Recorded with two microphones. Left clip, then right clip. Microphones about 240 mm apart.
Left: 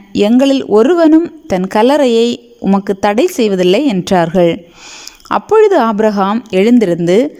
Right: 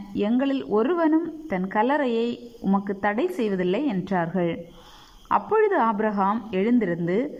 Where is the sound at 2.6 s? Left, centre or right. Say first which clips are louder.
Left 12 dB; left.